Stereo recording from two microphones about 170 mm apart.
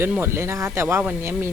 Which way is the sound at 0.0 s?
15° right (ahead or behind).